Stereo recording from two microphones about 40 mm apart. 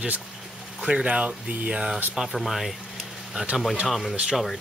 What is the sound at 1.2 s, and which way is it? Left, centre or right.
Speech, right.